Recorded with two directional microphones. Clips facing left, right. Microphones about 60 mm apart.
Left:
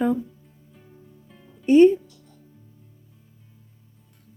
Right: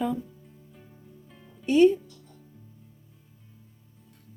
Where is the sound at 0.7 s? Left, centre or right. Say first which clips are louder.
Left 5 dB; centre.